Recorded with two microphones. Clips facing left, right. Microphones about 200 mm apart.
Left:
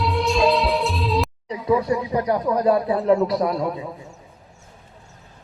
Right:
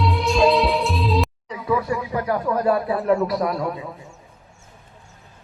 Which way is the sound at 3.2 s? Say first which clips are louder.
Left 1 dB; centre (ahead or behind).